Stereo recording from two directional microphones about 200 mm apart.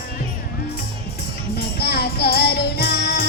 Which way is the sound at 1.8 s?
55° left (ahead or behind).